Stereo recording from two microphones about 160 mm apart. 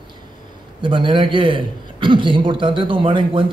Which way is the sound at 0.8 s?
30° right (ahead or behind).